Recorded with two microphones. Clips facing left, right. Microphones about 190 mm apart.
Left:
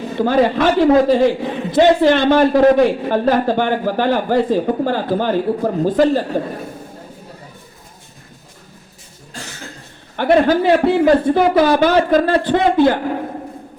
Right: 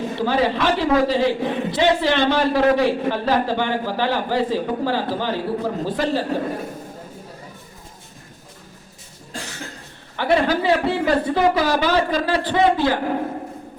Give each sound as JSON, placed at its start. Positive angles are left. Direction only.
{"t": 0.2, "sound": "a man's voice", "side_deg": 50}
{"t": 10.2, "sound": "a man's voice", "side_deg": 50}